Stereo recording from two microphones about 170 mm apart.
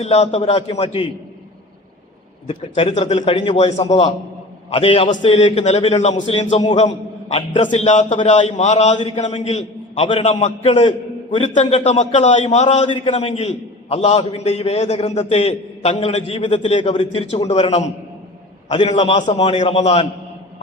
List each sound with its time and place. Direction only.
0.0 s a man's voice: 40° left (ahead or behind)
2.5 s a man's voice: 40° left (ahead or behind)